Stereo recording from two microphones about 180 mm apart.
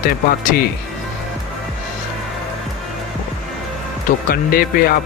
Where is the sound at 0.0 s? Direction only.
50° left (ahead or behind).